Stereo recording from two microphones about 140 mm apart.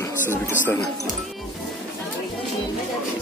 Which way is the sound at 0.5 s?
15° left (ahead or behind).